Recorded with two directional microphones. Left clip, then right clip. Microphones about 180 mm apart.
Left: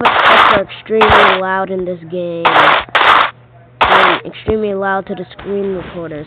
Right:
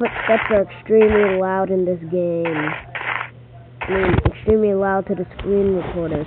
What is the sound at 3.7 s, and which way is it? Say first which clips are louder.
Cough: left 13 dB; 90° left.